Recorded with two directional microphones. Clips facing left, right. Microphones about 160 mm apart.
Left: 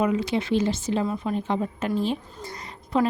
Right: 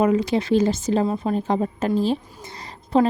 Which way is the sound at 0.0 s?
40° right (ahead or behind).